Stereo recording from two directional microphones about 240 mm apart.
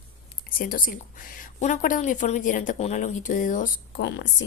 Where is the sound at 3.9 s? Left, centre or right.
Left.